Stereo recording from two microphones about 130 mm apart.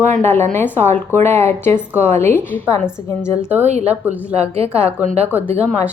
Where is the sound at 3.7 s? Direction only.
60° right (ahead or behind).